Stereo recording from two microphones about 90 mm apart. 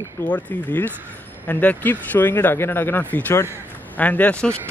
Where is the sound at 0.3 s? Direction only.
20° left (ahead or behind).